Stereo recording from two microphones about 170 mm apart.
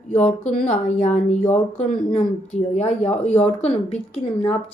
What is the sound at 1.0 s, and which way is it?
Speech, 45° left (ahead or behind).